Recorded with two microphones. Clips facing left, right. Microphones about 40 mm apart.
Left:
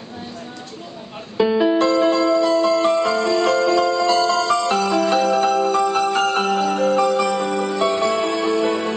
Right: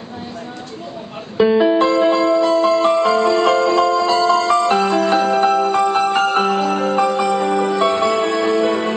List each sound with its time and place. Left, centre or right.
1.4 s music: centre